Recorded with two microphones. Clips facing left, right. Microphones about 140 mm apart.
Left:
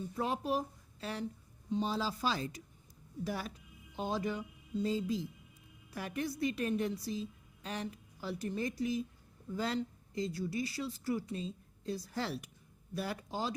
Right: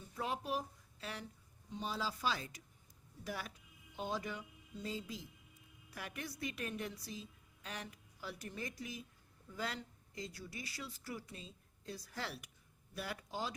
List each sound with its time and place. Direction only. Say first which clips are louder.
0.2 s a woman's voice: left 5 dB; 35° left (ahead or behind)
1.7 s a woman's voice: left 7 dB; 30° left (ahead or behind)